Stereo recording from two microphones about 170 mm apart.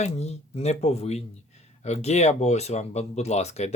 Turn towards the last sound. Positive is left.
turn(degrees=40)  # may be behind; listen again after turning